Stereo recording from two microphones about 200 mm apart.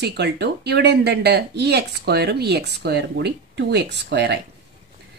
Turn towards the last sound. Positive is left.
turn(degrees=-55)  # may be behind; listen again after turning